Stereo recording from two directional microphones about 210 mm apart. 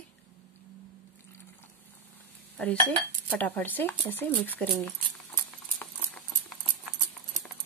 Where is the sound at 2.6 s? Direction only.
5° left (ahead or behind).